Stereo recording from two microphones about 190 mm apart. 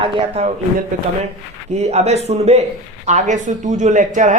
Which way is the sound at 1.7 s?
35° right (ahead or behind).